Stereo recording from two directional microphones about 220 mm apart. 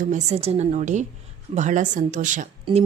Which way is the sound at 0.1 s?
30° right (ahead or behind).